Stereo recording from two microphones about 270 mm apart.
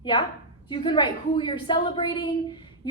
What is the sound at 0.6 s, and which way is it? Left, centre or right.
A woman's voice, centre.